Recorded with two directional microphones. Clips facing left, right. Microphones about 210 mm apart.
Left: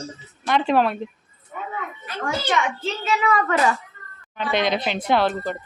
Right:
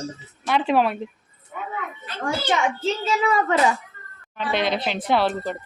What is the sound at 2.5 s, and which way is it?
A child's voice, 30° right (ahead or behind).